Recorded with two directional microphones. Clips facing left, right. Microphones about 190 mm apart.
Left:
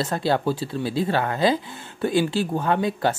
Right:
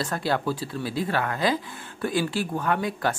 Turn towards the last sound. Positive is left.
turn(degrees=25)  # may be behind; listen again after turning